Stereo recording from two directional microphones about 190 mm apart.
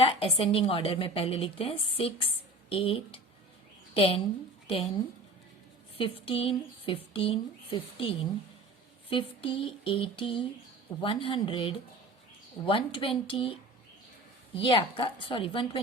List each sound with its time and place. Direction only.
0.0 s a woman's voice: 30° left (ahead or behind)
6.0 s a woman's voice: 30° left (ahead or behind)